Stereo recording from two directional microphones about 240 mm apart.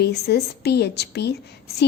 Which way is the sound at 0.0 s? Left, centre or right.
Left.